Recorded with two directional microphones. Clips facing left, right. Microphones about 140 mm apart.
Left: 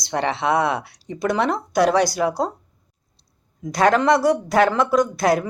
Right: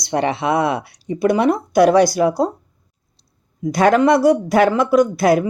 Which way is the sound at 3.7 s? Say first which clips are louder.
Right 3 dB; 10° right (ahead or behind).